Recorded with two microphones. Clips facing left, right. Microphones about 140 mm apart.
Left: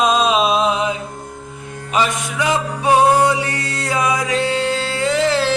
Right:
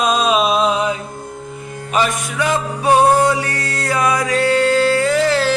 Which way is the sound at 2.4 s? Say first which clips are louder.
Right 1 dB; 20° left (ahead or behind).